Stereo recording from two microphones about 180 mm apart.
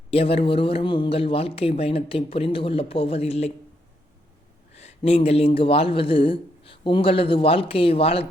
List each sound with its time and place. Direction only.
0.1 s speech: 35° left (ahead or behind)
4.8 s speech: 35° left (ahead or behind)